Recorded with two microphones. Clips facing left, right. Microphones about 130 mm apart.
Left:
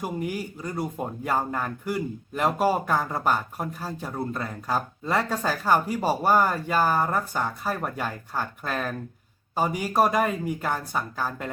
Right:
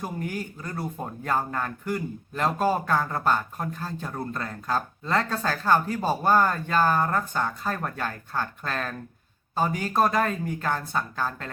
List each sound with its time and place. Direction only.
0.0 s speech: 10° left (ahead or behind)